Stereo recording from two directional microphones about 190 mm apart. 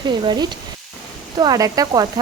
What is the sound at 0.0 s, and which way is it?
A woman's voice, 25° right (ahead or behind).